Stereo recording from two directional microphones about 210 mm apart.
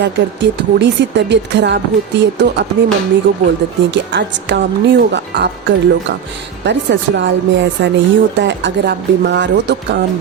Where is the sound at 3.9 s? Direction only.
60° right (ahead or behind).